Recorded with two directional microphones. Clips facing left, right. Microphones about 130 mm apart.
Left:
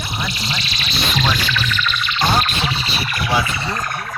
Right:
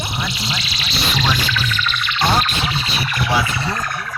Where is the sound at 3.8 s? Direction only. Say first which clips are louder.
Even; 45° left (ahead or behind).